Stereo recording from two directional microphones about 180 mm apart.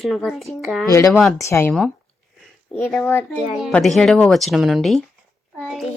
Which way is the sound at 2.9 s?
10° left (ahead or behind).